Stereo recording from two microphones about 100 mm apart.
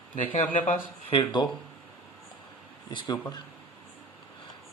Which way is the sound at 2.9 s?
50° left (ahead or behind).